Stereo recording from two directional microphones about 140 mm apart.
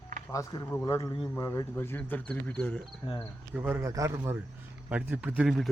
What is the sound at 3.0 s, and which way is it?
Speech, 40° left (ahead or behind).